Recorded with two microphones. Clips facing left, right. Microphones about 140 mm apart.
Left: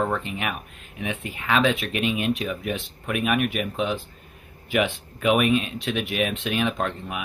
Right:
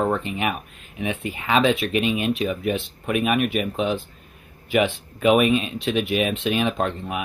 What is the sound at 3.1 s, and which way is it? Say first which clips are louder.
Speech: right 3 dB; 5° right (ahead or behind).